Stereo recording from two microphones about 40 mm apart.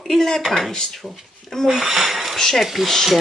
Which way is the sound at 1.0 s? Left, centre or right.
Centre.